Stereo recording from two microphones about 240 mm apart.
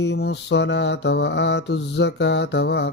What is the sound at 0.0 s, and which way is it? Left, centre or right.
Mantra, left.